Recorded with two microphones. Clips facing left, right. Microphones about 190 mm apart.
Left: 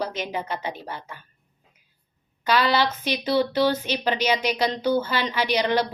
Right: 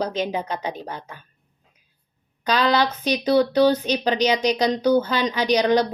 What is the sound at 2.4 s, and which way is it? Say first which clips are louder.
A woman's voice: right 1 dB; 15° right (ahead or behind).